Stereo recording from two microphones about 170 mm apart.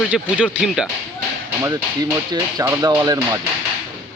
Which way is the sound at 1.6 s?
20° right (ahead or behind).